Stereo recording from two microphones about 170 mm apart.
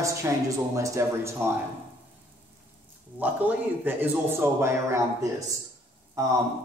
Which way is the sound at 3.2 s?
10° right (ahead or behind).